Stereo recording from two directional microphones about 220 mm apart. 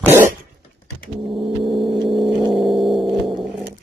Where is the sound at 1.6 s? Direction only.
25° right (ahead or behind).